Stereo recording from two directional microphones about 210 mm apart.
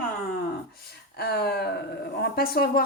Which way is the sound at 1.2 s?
50° left (ahead or behind).